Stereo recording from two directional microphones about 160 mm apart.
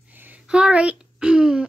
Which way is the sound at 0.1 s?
10° right (ahead or behind).